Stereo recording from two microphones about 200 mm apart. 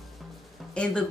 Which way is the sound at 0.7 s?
5° left (ahead or behind).